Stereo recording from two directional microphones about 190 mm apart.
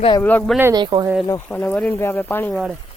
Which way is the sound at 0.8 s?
25° right (ahead or behind).